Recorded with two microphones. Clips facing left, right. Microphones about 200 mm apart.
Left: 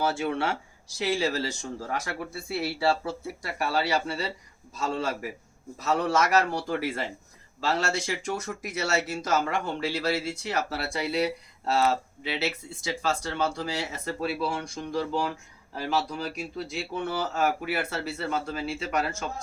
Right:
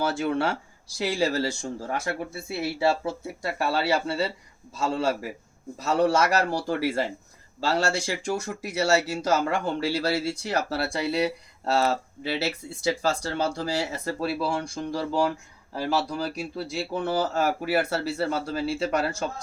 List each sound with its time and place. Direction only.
0.1 s speech: 35° right (ahead or behind)
16.0 s speech: 35° right (ahead or behind)